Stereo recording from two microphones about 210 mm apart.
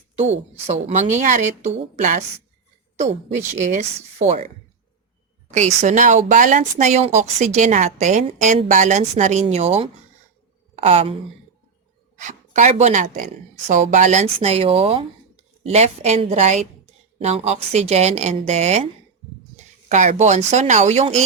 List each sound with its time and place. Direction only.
0.7 s speech: 30° right (ahead or behind)
5.5 s a woman's voice: 35° right (ahead or behind)